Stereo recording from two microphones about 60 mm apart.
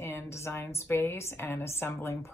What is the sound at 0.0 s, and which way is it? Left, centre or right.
A woman's voice, left.